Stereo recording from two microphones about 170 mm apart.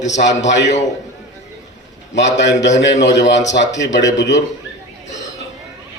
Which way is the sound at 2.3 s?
90° left.